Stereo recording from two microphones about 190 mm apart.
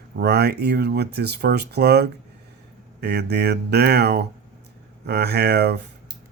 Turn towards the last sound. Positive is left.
turn(degrees=-60)  # may be behind; listen again after turning